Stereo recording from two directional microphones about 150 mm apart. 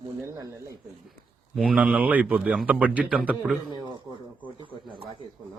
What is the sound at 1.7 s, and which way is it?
Speech, 10° right (ahead or behind).